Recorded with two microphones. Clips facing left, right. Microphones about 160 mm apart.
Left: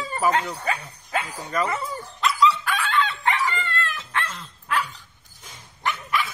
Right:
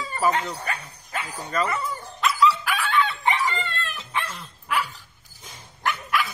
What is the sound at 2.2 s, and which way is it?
Dog, centre (ahead or behind).